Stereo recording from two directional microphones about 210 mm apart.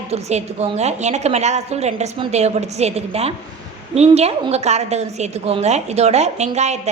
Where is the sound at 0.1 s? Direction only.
30° right (ahead or behind).